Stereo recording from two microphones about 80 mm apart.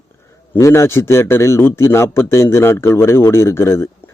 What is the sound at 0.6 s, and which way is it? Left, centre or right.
Speech, left.